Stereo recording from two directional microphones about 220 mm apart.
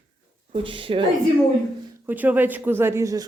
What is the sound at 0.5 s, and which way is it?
Speech, 25° right (ahead or behind).